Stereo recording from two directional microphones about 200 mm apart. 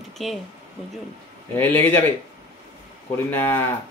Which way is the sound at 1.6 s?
10° left (ahead or behind).